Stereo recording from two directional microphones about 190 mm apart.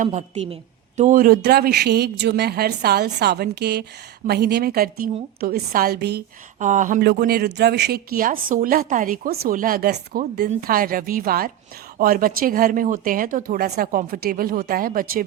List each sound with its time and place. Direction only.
0.0 s a woman's voice: 40° right (ahead or behind); by 6.2 s 60° right (ahead or behind)
6.6 s speech: 40° right (ahead or behind)
7.0 s a woman's voice: 55° right (ahead or behind)